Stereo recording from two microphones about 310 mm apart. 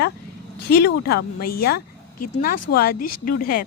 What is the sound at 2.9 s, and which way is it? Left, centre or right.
Speech, left.